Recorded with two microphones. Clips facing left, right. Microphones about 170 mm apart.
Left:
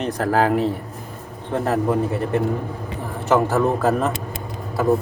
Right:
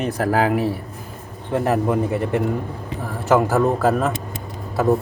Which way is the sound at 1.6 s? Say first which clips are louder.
Even; 15° right (ahead or behind).